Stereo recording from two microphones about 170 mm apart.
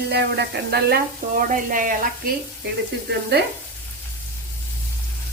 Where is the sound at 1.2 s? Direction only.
55° right (ahead or behind).